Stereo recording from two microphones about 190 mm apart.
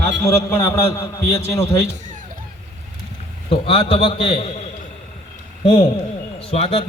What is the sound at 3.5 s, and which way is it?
A man's voice, 30° left (ahead or behind).